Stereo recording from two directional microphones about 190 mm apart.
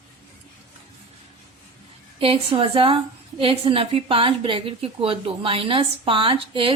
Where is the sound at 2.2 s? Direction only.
30° right (ahead or behind).